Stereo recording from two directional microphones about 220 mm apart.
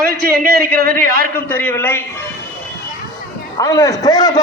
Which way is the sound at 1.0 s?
40° right (ahead or behind).